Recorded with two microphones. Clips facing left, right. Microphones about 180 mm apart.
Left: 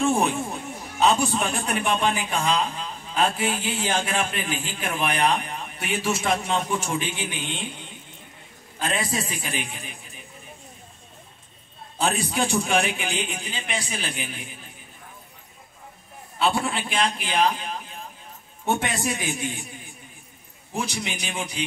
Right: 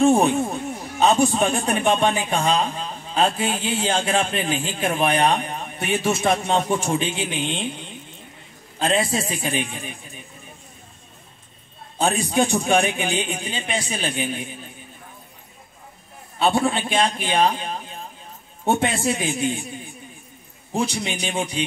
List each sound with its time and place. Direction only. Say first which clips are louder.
0.9 s a man's voice: right 3 dB; 25° right (ahead or behind)
12.0 s a man's voice: right 4 dB; 25° right (ahead or behind)
16.3 s a man's voice: right 4 dB; 25° right (ahead or behind)
21.0 s a man's voice: right 5 dB; 25° right (ahead or behind)